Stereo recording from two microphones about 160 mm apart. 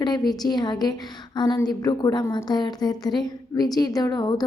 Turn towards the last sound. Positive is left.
turn(degrees=25)  # may be behind; listen again after turning